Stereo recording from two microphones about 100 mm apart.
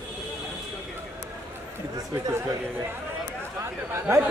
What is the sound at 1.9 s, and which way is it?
Speech, 35° right (ahead or behind).